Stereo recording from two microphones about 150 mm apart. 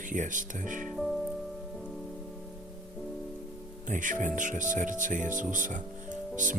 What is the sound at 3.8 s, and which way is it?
Speech, 60° right (ahead or behind).